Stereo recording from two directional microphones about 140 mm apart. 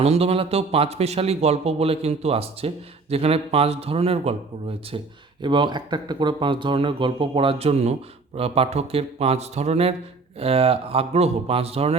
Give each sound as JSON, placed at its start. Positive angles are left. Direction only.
{"t": 0.0, "sound": "speech", "side_deg": -45}
{"t": 5.4, "sound": "speech", "side_deg": -35}